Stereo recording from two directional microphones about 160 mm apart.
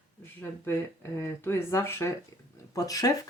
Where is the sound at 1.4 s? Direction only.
15° left (ahead or behind).